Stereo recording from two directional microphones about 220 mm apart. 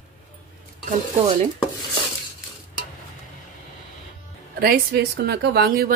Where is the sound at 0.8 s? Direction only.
30° right (ahead or behind).